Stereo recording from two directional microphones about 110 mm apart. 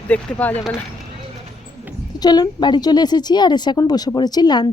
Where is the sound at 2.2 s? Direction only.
40° left (ahead or behind).